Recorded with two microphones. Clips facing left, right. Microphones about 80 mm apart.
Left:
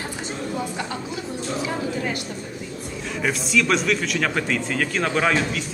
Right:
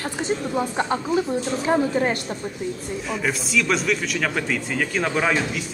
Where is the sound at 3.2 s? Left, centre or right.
Centre.